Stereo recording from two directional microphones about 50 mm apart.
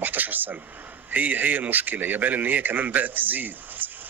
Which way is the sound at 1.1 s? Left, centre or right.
Right.